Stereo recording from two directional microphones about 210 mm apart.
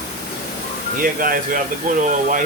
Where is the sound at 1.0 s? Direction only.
45° right (ahead or behind).